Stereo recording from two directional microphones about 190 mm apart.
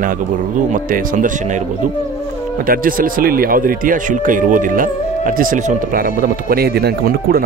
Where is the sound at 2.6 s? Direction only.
50° right (ahead or behind).